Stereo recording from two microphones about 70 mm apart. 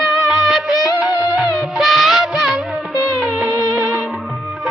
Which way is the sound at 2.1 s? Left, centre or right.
Centre.